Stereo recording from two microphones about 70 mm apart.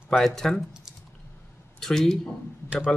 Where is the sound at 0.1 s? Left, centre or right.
Centre.